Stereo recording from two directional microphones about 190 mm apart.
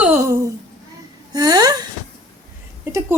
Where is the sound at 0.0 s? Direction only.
15° right (ahead or behind).